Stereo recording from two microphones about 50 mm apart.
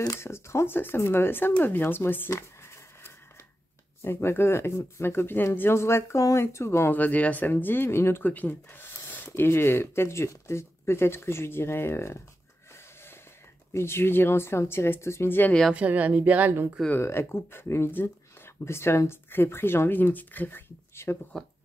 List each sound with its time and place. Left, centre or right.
0.1 s speech: left
0.7 s speech: left
2.3 s a sound: left
4.0 s speech: left
5.0 s speech: left
5.6 s speech: left
6.9 s speech: left
8.2 s speech: left
13.7 s speech: left
15.2 s speech: left
15.7 s speech: right
17.0 s speech: left
20.9 s speech: left